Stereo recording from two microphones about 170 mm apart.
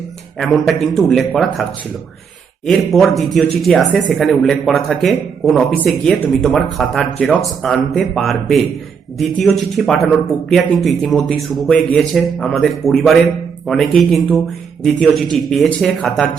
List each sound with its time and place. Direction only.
0.3 s a man's voice: centre (ahead or behind)
2.6 s a man's voice: centre (ahead or behind)